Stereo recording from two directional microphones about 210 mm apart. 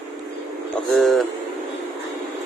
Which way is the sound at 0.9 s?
Centre (ahead or behind).